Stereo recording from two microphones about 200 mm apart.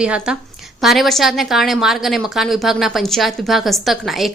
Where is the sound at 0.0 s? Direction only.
5° right (ahead or behind).